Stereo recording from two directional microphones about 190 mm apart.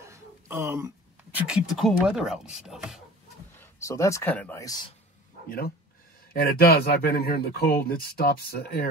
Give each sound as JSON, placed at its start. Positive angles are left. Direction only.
{"t": 0.0, "sound": "a sound", "side_deg": -15}
{"t": 1.5, "sound": "speech", "side_deg": 0}
{"t": 3.5, "sound": "speech", "side_deg": 15}
{"t": 6.3, "sound": "speech", "side_deg": 50}